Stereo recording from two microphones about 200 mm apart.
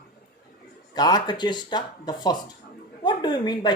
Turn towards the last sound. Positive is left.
turn(degrees=20)  # may be behind; listen again after turning